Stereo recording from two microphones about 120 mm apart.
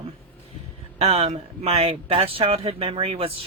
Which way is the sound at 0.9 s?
55° right (ahead or behind).